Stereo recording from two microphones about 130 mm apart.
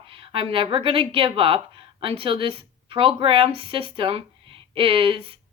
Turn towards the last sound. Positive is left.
turn(degrees=-45)  # may be behind; listen again after turning